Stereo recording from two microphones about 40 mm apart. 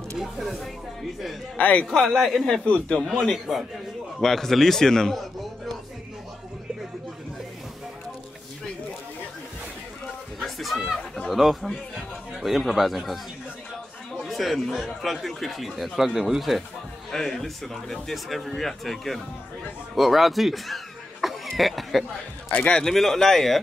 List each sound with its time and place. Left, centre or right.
0.2 s speech: centre
1.6 s a man's voice: left
2.0 s speech: centre
10.4 s music: centre
11.2 s speech: centre
14.2 s chatter: centre
14.7 s speech: centre
16.3 s a man's voice: centre
22.7 s speech: centre
22.9 s speech: centre